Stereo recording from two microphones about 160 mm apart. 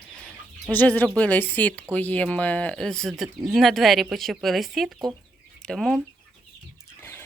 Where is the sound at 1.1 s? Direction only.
10° left (ahead or behind).